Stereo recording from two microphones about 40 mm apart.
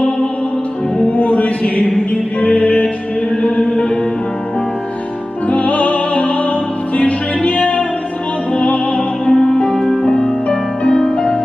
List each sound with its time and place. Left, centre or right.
1.0 s music: left
5.5 s music: left
8.9 s music: centre